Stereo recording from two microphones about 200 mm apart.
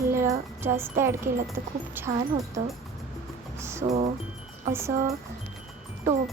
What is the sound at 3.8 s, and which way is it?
Speech, 30° right (ahead or behind).